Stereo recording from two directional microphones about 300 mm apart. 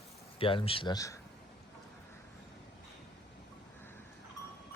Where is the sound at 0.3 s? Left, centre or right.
Centre.